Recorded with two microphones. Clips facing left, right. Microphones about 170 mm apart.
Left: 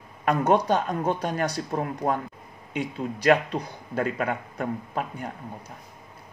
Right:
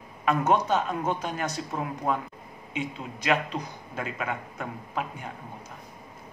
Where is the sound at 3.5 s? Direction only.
35° left (ahead or behind).